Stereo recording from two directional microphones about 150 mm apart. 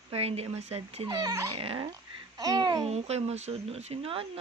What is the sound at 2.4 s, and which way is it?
Speech, 25° right (ahead or behind).